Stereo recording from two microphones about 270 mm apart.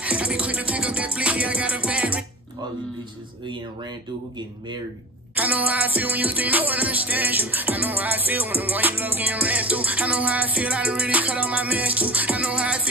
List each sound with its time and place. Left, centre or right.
0.0 s music: centre
3.4 s music: centre
5.3 s music: centre